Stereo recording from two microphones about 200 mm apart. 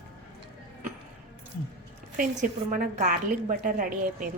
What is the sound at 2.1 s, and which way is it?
A woman's voice, 35° right (ahead or behind).